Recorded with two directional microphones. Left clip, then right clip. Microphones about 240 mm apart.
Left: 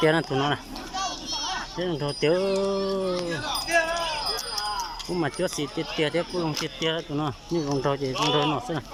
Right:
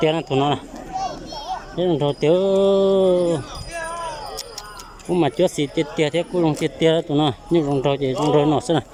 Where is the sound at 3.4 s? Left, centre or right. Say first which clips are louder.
Left 7 dB; left.